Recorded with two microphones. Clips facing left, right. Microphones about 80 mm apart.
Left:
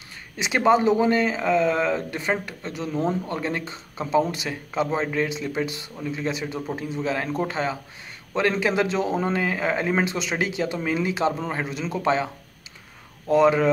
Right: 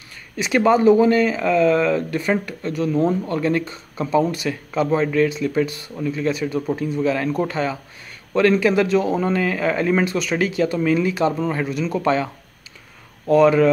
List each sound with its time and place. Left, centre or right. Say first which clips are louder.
0.4 s a man's voice: right 3 dB; left
13.3 s a man's voice: right 4 dB; left